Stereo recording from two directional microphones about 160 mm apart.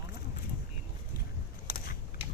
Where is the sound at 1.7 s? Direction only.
65° left (ahead or behind).